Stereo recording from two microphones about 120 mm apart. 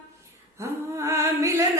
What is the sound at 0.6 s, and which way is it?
Mantra, 25° right (ahead or behind).